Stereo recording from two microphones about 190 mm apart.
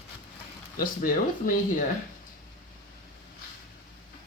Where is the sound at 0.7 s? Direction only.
50° left (ahead or behind).